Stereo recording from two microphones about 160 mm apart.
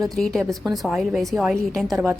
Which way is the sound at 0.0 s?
Centre (ahead or behind).